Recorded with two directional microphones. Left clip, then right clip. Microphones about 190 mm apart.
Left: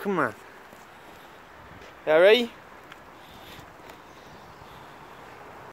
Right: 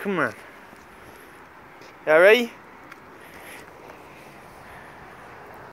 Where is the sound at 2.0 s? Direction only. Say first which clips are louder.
Right 3 dB; 5° left (ahead or behind).